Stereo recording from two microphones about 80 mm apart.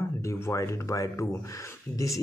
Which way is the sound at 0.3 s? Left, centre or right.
Left.